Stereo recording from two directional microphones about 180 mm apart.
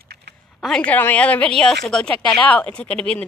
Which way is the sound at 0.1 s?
70° right (ahead or behind).